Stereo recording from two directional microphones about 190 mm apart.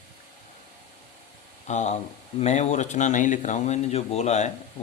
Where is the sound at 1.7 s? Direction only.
35° left (ahead or behind).